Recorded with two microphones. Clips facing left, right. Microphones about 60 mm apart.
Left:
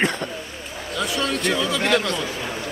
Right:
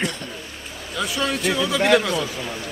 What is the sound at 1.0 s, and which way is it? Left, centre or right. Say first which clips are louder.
Speech: even; centre.